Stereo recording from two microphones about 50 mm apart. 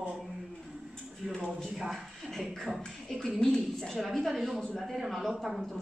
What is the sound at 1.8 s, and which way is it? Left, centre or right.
Speech, centre.